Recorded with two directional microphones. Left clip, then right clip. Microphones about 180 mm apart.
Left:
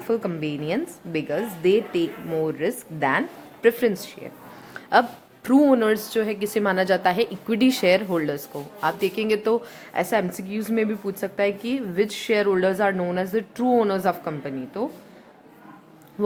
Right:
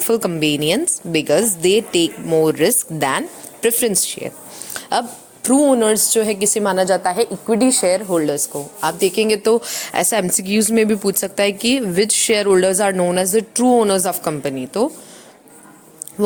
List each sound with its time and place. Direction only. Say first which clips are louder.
0.1 s speech: right 8 dB; 50° right (ahead or behind)
3.6 s speech: right 2 dB; 40° right (ahead or behind)
4.7 s a sound: left 1 dB; 35° right (ahead or behind)
5.4 s a woman's voice: right 4 dB; 15° right (ahead or behind)
6.8 s a woman's voice: right 4 dB; 5° right (ahead or behind)
8.1 s speech: right 7 dB; 20° right (ahead or behind); by 14.8 s 45° right (ahead or behind)